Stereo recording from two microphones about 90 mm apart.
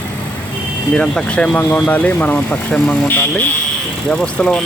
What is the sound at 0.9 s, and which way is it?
Speech, 15° left (ahead or behind).